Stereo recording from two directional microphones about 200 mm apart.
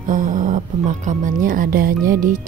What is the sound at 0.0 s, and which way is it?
Speech, 40° right (ahead or behind).